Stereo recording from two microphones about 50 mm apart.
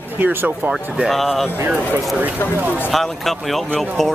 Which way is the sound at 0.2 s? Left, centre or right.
Right.